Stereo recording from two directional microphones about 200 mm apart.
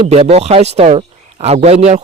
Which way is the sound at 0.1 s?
30° right (ahead or behind).